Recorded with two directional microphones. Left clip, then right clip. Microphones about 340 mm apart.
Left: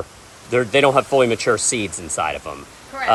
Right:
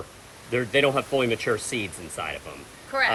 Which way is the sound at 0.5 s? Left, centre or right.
Centre.